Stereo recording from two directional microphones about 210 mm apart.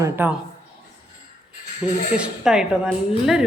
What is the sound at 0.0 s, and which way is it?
Speech, 10° right (ahead or behind).